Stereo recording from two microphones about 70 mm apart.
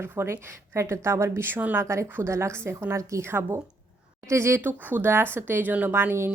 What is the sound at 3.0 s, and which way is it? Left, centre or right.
Speech, right.